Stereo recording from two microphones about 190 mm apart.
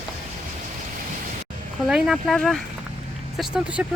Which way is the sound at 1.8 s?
Centre (ahead or behind).